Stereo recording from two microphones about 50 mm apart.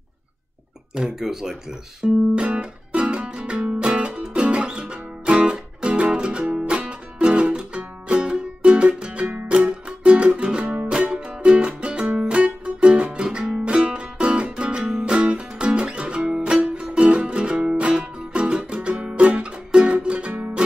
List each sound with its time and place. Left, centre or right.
0.9 s speech: centre
2.0 s guitar: right
2.3 s music: right